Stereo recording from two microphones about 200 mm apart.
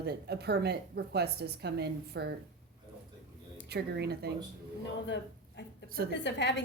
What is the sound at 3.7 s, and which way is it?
Speech, 55° right (ahead or behind).